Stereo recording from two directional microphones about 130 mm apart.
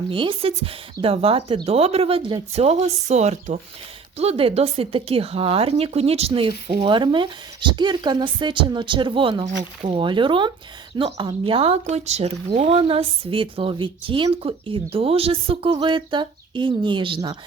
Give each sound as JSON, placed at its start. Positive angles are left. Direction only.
{"t": 0.1, "sound": "speech", "side_deg": -40}
{"t": 4.2, "sound": "a woman's voice", "side_deg": -50}